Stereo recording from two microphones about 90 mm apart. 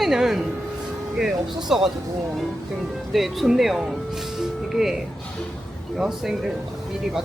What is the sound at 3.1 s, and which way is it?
Speech, centre (ahead or behind).